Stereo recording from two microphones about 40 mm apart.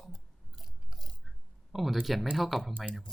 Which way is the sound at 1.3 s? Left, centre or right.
Centre.